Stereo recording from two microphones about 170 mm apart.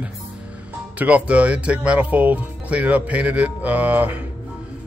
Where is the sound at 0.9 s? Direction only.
10° right (ahead or behind).